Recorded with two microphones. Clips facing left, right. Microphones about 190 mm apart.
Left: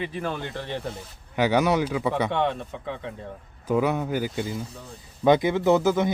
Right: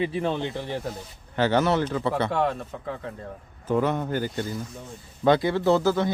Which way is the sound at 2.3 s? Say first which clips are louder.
Even; centre (ahead or behind).